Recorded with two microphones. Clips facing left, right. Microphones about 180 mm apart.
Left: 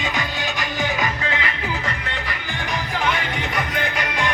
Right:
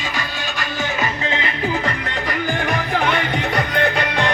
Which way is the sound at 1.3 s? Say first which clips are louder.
Right 4 dB; 30° right (ahead or behind).